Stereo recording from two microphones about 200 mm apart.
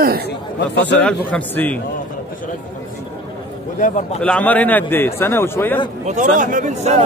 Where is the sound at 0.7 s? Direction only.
5° left (ahead or behind).